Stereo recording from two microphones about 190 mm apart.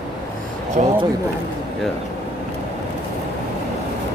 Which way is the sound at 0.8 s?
40° right (ahead or behind).